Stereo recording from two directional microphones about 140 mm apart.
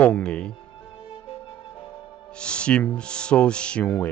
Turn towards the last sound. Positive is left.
turn(degrees=10)  # may be behind; listen again after turning